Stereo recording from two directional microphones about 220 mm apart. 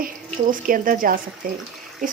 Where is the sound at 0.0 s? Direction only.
40° right (ahead or behind).